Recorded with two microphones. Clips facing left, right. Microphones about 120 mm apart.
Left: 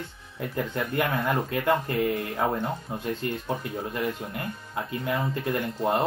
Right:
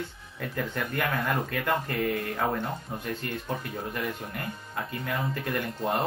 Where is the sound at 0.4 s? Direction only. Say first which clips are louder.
Left 2 dB; 25° left (ahead or behind).